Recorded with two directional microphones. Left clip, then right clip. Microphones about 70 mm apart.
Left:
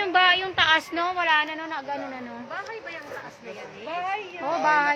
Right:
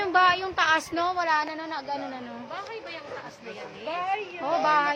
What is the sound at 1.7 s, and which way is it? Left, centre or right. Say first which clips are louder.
Speech: left 1 dB; left.